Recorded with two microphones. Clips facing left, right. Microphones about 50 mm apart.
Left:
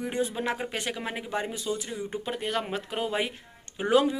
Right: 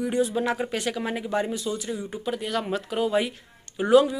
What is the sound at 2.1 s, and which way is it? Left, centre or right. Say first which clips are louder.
A woman's voice: right 1 dB; left.